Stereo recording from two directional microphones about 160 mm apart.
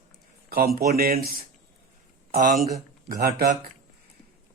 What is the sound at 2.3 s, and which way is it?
Speech, 55° right (ahead or behind).